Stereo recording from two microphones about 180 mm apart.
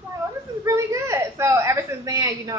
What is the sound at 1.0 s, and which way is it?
Speech, 15° right (ahead or behind).